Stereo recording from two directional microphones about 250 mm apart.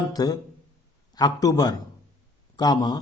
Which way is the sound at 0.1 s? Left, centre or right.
Centre.